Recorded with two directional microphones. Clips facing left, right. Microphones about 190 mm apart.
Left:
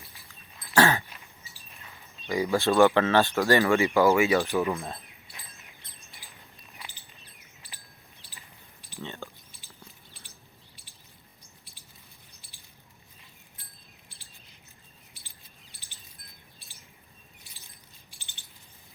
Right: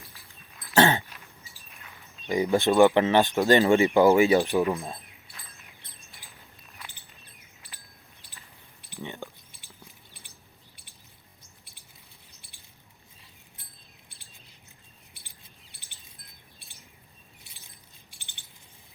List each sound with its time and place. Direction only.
0.8 s a sound: 20° right (ahead or behind)
2.2 s speech: 20° right (ahead or behind)
4.1 s speech: 30° right (ahead or behind)
4.4 s speech: 15° right (ahead or behind)
6.1 s bird: centre (ahead or behind)
9.0 s a sound: 15° right (ahead or behind)
15.2 s mouse: 55° right (ahead or behind)
15.7 s bird: 55° right (ahead or behind)
18.1 s a sound: 55° right (ahead or behind)